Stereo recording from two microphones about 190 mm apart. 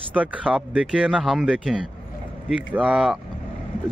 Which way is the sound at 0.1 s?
5° right (ahead or behind).